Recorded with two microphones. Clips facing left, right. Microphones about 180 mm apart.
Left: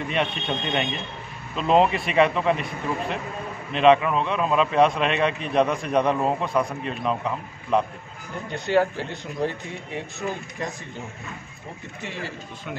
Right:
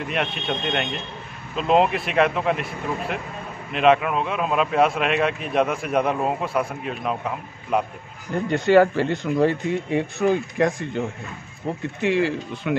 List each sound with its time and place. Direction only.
0.0 s a man's voice: centre (ahead or behind)
8.5 s speech: 70° right (ahead or behind)